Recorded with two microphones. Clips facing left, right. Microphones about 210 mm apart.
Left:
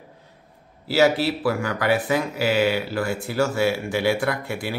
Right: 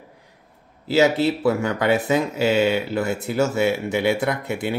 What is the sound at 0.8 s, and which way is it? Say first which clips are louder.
Speech: right 1 dB; 20° right (ahead or behind).